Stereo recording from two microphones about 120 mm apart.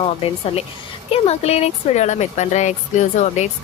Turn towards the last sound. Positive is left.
turn(degrees=80)